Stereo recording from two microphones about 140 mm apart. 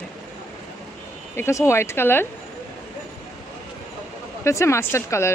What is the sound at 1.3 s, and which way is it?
Speech, 20° left (ahead or behind).